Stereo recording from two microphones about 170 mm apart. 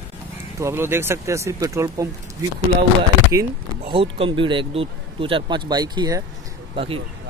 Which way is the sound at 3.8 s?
35° right (ahead or behind).